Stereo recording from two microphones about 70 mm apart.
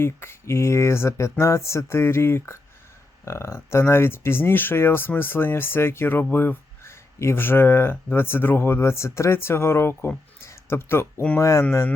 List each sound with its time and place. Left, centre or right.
0.0 s speech: left
10.4 s a sound: left
11.3 s speech: left